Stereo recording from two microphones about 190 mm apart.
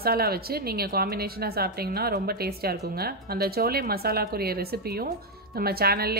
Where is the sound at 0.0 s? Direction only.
55° right (ahead or behind).